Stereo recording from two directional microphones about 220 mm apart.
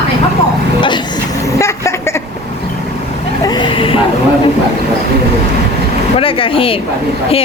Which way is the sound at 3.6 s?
25° left (ahead or behind).